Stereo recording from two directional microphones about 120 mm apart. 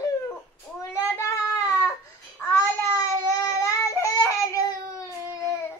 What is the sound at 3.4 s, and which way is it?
Baby cry, 25° left (ahead or behind).